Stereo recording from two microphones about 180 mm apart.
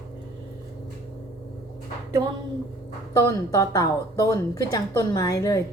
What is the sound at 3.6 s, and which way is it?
A woman's voice, 20° left (ahead or behind).